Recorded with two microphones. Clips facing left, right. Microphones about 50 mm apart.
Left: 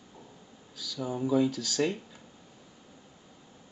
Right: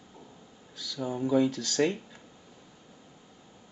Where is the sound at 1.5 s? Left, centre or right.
Right.